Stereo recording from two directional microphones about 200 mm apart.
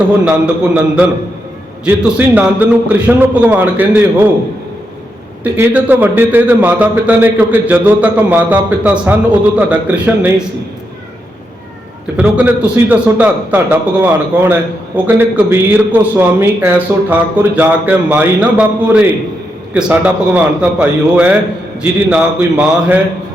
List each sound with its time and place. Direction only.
0.3 s a man's voice: 5° right (ahead or behind)
5.4 s a man's voice: 10° right (ahead or behind)
12.1 s a man's voice: 5° right (ahead or behind)